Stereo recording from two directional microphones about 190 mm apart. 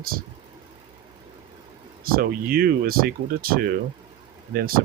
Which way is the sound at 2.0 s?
50° right (ahead or behind).